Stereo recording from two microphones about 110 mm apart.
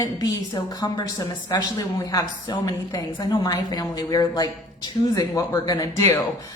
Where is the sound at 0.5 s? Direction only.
40° left (ahead or behind).